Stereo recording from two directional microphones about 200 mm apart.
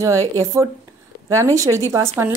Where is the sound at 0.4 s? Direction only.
15° right (ahead or behind).